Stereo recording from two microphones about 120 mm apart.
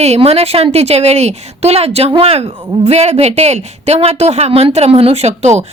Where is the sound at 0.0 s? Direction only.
60° right (ahead or behind).